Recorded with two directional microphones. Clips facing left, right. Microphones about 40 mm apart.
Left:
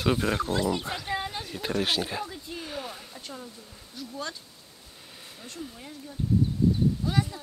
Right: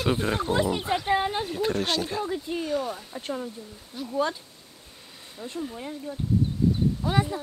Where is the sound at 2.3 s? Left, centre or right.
Right.